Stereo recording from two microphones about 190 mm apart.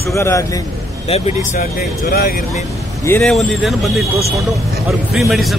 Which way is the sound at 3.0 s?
5° left (ahead or behind).